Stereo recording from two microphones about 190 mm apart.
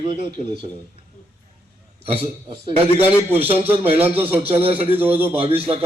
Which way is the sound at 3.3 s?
30° right (ahead or behind).